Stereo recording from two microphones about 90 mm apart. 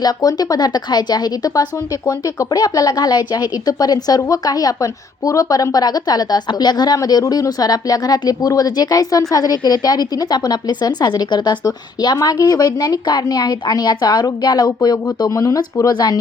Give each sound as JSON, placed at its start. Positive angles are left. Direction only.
{"t": 0.0, "sound": "speech", "side_deg": 45}